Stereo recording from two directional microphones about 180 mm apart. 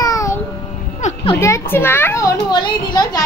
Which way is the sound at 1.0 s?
40° left (ahead or behind).